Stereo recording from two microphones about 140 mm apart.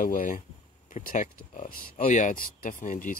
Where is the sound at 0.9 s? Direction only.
60° left (ahead or behind).